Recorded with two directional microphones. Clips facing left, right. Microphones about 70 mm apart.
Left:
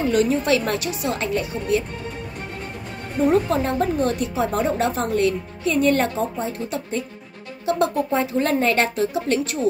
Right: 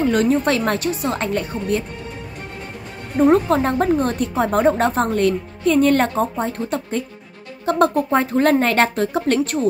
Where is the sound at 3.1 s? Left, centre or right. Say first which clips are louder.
Right 4 dB; right.